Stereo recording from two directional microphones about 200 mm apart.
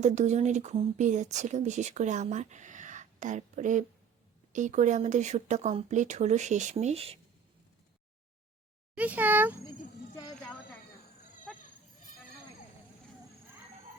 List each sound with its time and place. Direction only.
0.0 s speech: 35° right (ahead or behind)
9.0 s a child's voice: 10° right (ahead or behind)
11.5 s goat: centre (ahead or behind)